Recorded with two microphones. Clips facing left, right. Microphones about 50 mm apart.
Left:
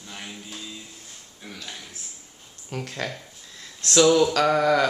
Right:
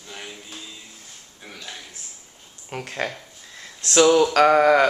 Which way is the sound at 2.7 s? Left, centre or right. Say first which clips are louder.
Right 3 dB; right.